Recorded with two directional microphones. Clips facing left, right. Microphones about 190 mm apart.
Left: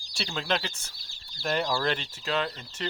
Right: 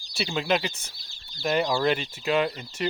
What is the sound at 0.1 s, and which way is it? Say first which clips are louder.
Speech: right 5 dB; 10° right (ahead or behind).